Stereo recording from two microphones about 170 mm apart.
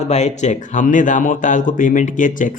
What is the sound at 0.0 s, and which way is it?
Speech, 40° left (ahead or behind).